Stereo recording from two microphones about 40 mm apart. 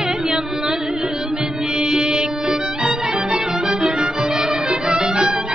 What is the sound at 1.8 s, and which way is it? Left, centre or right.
Music, centre.